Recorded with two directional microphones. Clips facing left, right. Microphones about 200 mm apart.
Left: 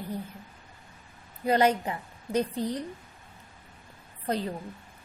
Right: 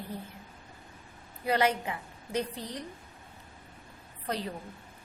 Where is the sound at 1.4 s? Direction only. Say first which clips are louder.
Left 4 dB; 35° left (ahead or behind).